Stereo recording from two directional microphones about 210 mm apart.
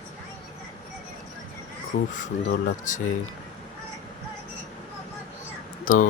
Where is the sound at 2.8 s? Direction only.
35° left (ahead or behind).